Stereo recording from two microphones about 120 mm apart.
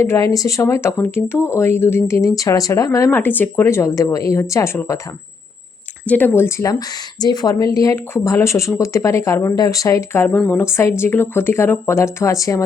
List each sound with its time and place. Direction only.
0.0 s speech: 25° left (ahead or behind)
6.1 s speech: 15° left (ahead or behind)
10.2 s speech: 10° left (ahead or behind)